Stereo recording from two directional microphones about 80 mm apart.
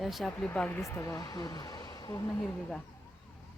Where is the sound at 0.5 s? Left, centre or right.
Left.